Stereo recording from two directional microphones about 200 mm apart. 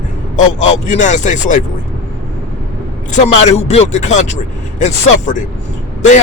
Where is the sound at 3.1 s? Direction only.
35° left (ahead or behind).